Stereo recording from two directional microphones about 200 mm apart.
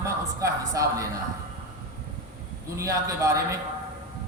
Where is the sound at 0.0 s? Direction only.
15° right (ahead or behind).